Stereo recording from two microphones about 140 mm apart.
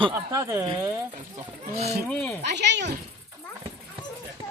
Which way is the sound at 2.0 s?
5° left (ahead or behind).